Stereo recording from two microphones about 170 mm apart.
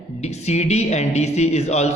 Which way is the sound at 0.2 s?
40° left (ahead or behind).